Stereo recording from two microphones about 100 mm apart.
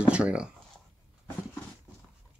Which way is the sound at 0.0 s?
10° right (ahead or behind).